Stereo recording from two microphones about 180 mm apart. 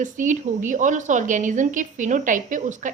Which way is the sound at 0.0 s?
45° right (ahead or behind).